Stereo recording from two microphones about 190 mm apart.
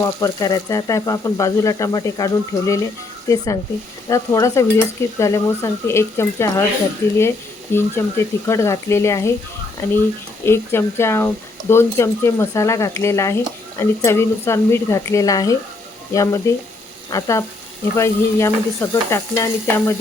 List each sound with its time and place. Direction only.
0.0 s speech: 15° left (ahead or behind)
10.4 s speech: 10° left (ahead or behind)